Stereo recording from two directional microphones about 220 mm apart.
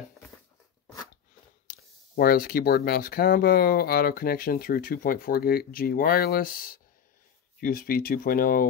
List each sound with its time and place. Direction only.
1.7 s speech: 40° left (ahead or behind)